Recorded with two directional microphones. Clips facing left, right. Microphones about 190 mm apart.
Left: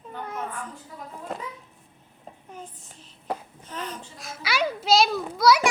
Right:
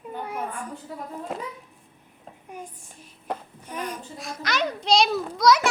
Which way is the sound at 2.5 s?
10° right (ahead or behind).